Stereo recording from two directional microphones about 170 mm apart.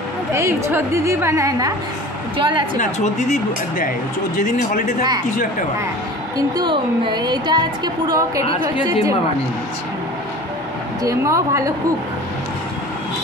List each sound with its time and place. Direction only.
0.3 s a woman's voice: 15° right (ahead or behind)
2.3 s a woman's voice: 30° right (ahead or behind)
2.8 s speech: 45° left (ahead or behind)
6.3 s a woman's voice: 25° right (ahead or behind)
11.1 s a woman's voice: 20° right (ahead or behind)